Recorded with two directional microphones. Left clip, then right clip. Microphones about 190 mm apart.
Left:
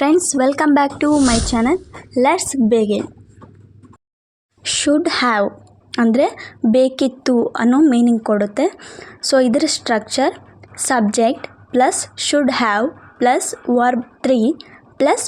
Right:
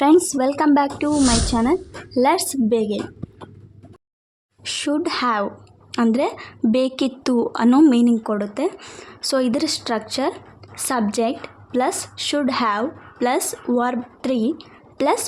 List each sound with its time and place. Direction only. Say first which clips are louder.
0.0 s a woman's voice: left 1 dB; 10° left (ahead or behind)
1.0 s speech: left 4 dB; centre (ahead or behind)
2.1 s a woman's voice: left 3 dB; 10° left (ahead or behind)
4.6 s a woman's voice: left 6 dB; 20° left (ahead or behind)